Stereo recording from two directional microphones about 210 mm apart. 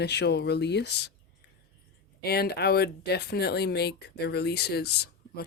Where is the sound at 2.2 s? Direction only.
50° left (ahead or behind).